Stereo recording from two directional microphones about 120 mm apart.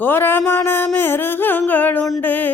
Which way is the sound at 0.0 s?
15° left (ahead or behind).